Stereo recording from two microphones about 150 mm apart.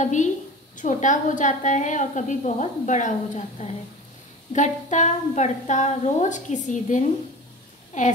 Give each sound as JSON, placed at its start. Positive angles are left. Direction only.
{"t": 0.0, "sound": "a woman's voice", "side_deg": 55}